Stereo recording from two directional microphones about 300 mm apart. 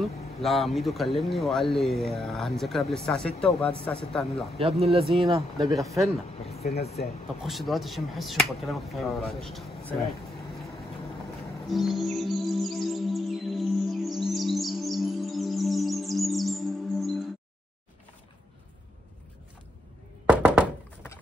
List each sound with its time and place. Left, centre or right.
0.0 s speech: centre
4.6 s speech: centre
5.0 s speech: centre
5.3 s speech: centre
6.8 s speech: left
7.4 s speech: centre
11.6 s music: centre
20.2 s thunk: centre